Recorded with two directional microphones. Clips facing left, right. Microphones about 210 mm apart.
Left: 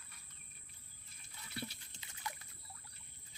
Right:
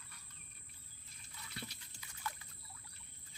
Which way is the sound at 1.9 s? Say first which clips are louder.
Right 1 dB; 20° left (ahead or behind).